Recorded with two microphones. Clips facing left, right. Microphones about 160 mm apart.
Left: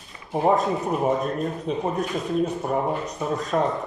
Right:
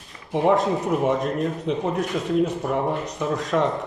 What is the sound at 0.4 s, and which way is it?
Speech, 75° right (ahead or behind).